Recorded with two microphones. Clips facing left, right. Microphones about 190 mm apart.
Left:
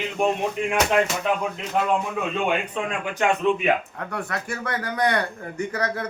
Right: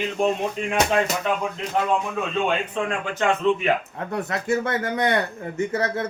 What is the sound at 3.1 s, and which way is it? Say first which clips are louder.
Speech: even; 15° left (ahead or behind).